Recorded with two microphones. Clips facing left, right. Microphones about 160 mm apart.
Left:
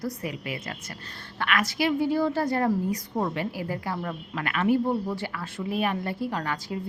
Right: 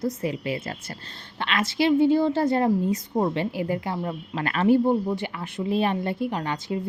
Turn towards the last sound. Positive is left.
turn(degrees=-20)  # may be behind; listen again after turning